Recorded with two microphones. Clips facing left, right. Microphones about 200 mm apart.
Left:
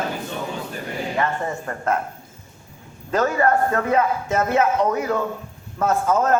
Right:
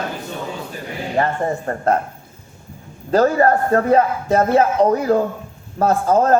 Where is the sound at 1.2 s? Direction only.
35° right (ahead or behind).